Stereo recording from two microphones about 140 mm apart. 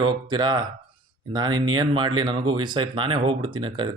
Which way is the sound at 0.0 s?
35° right (ahead or behind).